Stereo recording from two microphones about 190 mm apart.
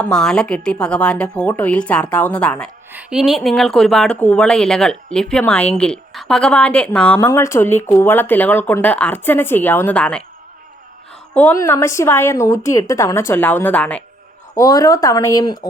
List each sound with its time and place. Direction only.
0.0 s a woman's voice: 5° left (ahead or behind)
2.9 s speech: 5° right (ahead or behind)
11.3 s speech: 10° left (ahead or behind)
14.5 s speech: 20° left (ahead or behind)